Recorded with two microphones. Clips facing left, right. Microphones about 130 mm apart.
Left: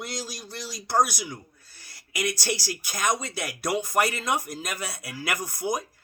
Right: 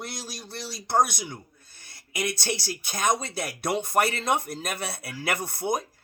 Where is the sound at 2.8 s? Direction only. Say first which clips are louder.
Right 2 dB; 25° right (ahead or behind).